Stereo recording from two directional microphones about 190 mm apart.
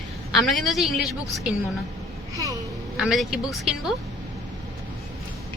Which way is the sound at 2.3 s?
15° right (ahead or behind).